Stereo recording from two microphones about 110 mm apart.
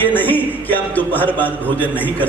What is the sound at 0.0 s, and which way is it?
A man's voice, 15° left (ahead or behind).